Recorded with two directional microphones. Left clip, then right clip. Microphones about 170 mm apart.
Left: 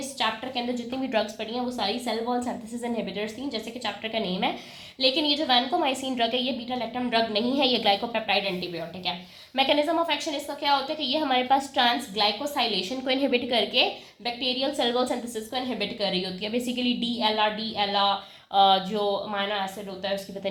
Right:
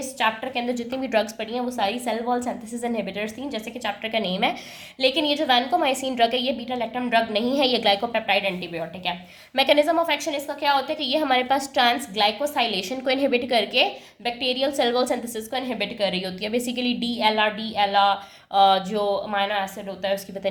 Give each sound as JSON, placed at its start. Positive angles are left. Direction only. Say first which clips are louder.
{"t": 0.2, "sound": "a woman's voice", "louder": "right 4 dB", "side_deg": -35}
{"t": 8.4, "sound": "a woman's voice", "louder": "right 3 dB", "side_deg": -40}
{"t": 9.6, "sound": "a woman's voice", "louder": "right 4 dB", "side_deg": -25}
{"t": 15.5, "sound": "a woman's voice", "louder": "right 3 dB", "side_deg": -40}
{"t": 16.5, "sound": "a woman's voice", "louder": "right 3 dB", "side_deg": -25}
{"t": 18.5, "sound": "a woman's voice", "louder": "right 2 dB", "side_deg": -20}